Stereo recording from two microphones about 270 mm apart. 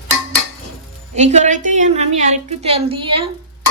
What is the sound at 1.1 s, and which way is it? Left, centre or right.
A woman's voice, right.